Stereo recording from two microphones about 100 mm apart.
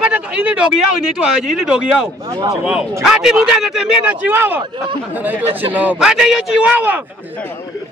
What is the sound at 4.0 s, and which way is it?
A man's voice, 15° right (ahead or behind).